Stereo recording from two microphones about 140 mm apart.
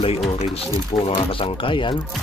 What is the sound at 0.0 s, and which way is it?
Speech, 40° left (ahead or behind).